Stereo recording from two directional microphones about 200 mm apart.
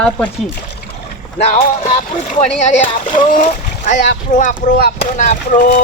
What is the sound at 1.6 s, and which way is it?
Speech, 40° left (ahead or behind).